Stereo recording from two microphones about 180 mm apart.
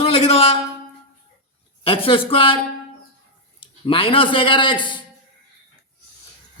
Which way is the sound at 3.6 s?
30° left (ahead or behind).